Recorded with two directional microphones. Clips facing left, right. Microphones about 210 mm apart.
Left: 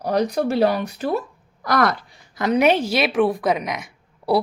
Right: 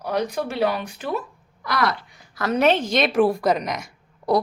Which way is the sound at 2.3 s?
15° left (ahead or behind).